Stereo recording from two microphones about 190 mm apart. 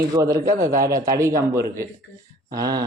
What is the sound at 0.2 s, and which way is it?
Speech, 15° right (ahead or behind).